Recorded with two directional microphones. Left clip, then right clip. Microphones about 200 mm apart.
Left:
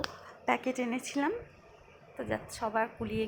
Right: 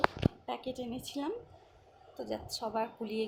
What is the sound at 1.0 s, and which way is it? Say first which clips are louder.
Speech: left 6 dB; 15° left (ahead or behind).